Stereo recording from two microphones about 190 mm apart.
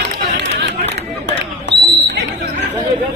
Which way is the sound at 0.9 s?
65° right (ahead or behind).